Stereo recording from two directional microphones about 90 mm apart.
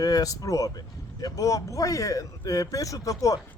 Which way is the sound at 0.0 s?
40° left (ahead or behind).